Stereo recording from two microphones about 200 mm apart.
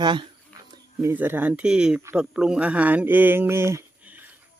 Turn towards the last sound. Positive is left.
turn(degrees=-10)  # may be behind; listen again after turning